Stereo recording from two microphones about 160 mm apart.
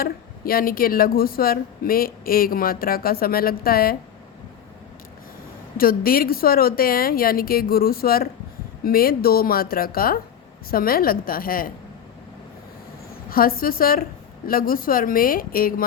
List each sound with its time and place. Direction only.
0.0 s speech: 65° left (ahead or behind)
5.7 s speech: 65° left (ahead or behind)
13.3 s speech: 65° left (ahead or behind)